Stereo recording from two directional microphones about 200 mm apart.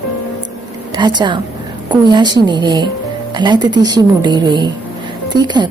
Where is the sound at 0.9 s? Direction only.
20° right (ahead or behind).